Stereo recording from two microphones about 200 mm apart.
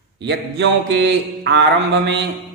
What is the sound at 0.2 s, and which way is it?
A man's voice, 60° right (ahead or behind).